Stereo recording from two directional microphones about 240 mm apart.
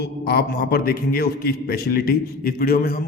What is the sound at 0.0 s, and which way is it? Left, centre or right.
A man's voice, left.